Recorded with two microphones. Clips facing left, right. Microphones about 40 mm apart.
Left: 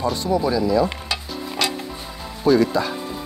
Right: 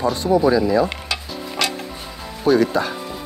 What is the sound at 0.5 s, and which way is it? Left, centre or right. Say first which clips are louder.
Stir: right 2 dB; right.